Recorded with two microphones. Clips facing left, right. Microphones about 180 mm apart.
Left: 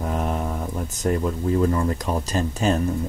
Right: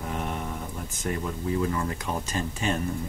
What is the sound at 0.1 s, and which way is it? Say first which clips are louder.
Mantra: left 5 dB; 35° left (ahead or behind).